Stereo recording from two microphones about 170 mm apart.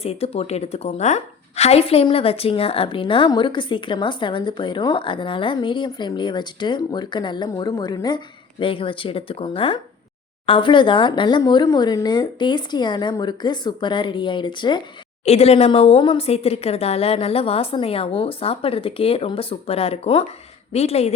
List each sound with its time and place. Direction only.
0.0 s a woman's voice: 35° left (ahead or behind)
15.2 s speech: 40° left (ahead or behind)